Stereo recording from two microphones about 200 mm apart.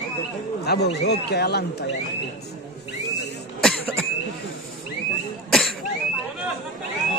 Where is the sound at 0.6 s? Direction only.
55° left (ahead or behind).